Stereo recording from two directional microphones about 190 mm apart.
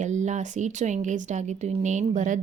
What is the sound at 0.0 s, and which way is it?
Speech, 40° right (ahead or behind).